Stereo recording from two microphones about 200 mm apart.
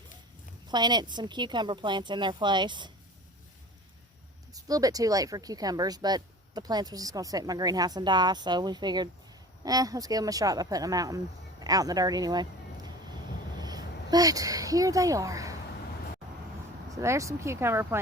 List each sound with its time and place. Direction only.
0.7 s speech: 20° right (ahead or behind)
4.5 s speech: 20° right (ahead or behind)
11.6 s a sound: 20° right (ahead or behind)
13.6 s a woman's voice: 20° right (ahead or behind)
16.9 s speech: 15° right (ahead or behind)